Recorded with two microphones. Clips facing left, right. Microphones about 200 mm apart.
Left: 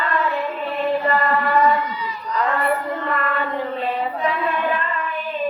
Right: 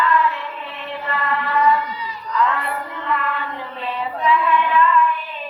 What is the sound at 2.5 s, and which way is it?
Female singing, 45° left (ahead or behind).